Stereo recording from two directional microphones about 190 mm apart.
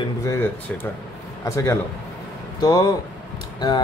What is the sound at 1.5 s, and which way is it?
A man's voice, 15° left (ahead or behind).